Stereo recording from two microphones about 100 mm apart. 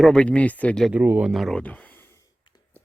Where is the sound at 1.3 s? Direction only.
Centre (ahead or behind).